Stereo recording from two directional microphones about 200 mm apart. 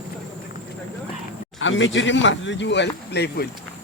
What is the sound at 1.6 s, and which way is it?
Speech, 70° left (ahead or behind).